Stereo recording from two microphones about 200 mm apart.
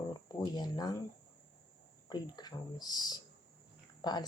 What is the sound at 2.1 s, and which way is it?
Speech, 20° left (ahead or behind).